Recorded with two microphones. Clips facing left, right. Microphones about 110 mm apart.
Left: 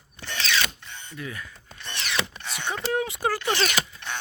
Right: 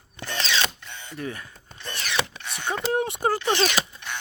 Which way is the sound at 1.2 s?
35° right (ahead or behind).